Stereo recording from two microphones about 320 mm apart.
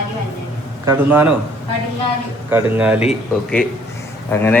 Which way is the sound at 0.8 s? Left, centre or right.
Centre.